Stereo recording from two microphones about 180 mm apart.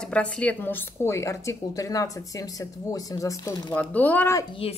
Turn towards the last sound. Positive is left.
turn(degrees=15)  # may be behind; listen again after turning